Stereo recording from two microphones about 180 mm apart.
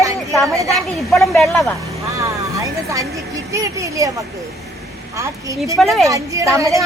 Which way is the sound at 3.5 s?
15° right (ahead or behind).